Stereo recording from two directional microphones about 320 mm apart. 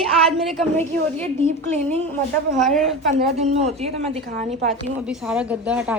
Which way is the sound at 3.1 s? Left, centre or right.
Centre.